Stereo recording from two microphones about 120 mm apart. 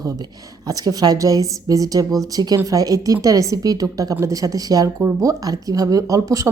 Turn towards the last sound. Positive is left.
turn(degrees=-25)  # may be behind; listen again after turning